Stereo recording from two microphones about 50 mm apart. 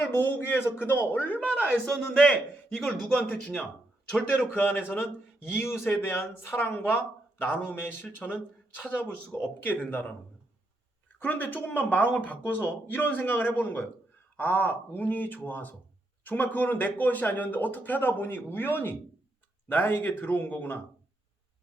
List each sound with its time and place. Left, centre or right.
0.0 s speech: left
0.9 s speech: left
1.9 s a man's voice: centre
2.2 s a man's voice: centre
4.3 s speech: left
9.3 s speech: left
9.6 s speech: left
11.2 s speech: left